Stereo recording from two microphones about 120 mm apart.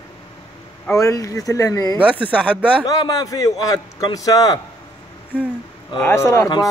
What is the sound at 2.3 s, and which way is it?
Speech, 10° left (ahead or behind).